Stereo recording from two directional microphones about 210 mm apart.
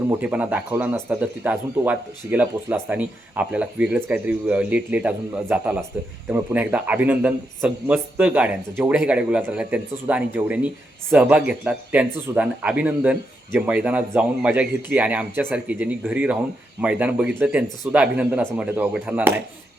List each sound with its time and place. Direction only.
0.2 s speech: 5° right (ahead or behind)